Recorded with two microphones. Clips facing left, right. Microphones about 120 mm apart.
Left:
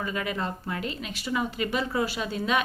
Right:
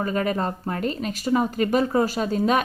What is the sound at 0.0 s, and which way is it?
A woman's voice, 40° right (ahead or behind).